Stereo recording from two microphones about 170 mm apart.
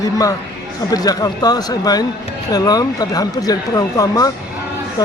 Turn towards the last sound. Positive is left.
turn(degrees=20)  # may be behind; listen again after turning